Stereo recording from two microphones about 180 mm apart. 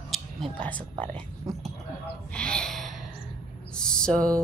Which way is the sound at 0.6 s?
10° left (ahead or behind).